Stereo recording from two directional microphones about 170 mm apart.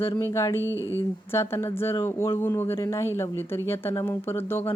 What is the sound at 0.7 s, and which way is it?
Speech, 15° right (ahead or behind).